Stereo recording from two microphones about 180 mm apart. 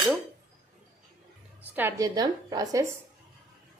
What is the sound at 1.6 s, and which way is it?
A woman's voice, 10° right (ahead or behind).